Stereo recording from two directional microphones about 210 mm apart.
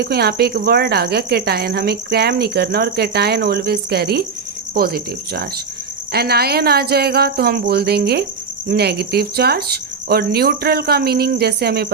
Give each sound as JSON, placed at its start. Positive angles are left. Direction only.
{"t": 0.0, "sound": "speech", "side_deg": -50}